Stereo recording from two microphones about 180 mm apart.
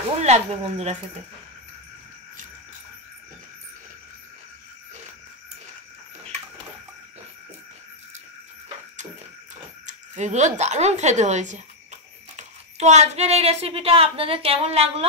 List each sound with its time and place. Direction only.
0.2 s speech: 40° right (ahead or behind)
9.8 s speech: 40° right (ahead or behind)